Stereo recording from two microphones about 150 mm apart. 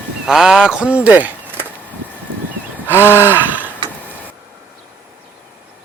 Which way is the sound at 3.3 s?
10° right (ahead or behind).